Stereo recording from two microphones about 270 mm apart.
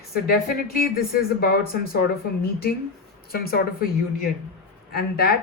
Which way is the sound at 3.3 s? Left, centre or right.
Left.